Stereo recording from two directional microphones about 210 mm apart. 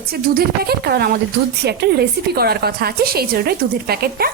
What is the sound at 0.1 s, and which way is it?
A woman's voice, 50° right (ahead or behind).